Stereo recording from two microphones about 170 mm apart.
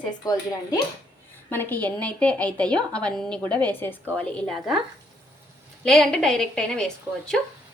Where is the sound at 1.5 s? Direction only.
10° left (ahead or behind).